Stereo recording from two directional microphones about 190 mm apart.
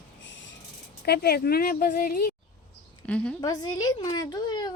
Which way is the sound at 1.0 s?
55° left (ahead or behind).